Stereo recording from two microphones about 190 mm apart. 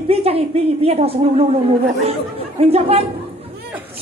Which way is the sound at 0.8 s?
35° right (ahead or behind).